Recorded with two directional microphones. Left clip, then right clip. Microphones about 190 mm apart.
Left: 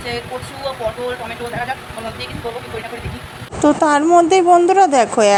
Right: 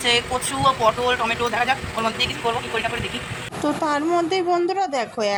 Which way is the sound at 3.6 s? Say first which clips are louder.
Left 9 dB; 25° left (ahead or behind).